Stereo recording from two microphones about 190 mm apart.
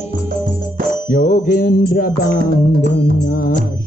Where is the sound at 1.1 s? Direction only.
45° left (ahead or behind).